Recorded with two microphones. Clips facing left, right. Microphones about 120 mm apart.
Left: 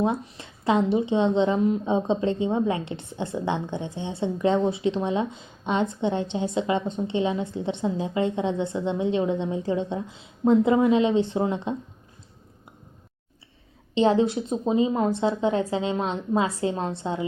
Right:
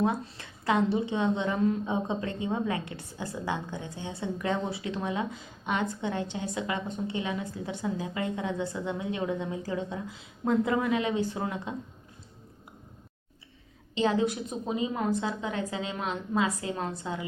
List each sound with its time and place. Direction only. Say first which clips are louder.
0.0 s a woman's voice: left 3 dB; 20° left (ahead or behind)
13.9 s a woman's voice: left 6 dB; 30° left (ahead or behind)